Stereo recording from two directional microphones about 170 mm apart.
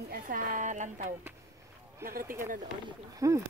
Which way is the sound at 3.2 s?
20° right (ahead or behind).